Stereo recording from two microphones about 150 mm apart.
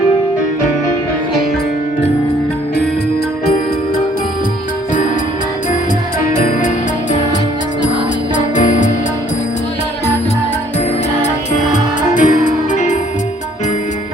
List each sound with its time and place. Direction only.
8.5 s music: 55° left (ahead or behind)
11.7 s music: 60° left (ahead or behind)